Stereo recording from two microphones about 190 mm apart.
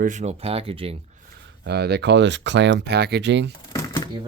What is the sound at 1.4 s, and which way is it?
Speech, 65° right (ahead or behind).